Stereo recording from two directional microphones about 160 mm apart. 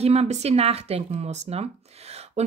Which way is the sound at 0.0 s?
40° right (ahead or behind).